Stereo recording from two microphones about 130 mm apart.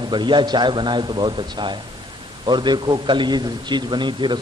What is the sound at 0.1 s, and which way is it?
A man's voice, 35° right (ahead or behind).